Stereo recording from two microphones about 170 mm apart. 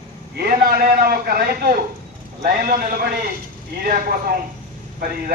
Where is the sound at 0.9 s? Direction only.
65° right (ahead or behind).